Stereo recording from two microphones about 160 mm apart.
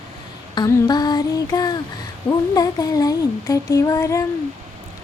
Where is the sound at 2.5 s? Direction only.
25° left (ahead or behind).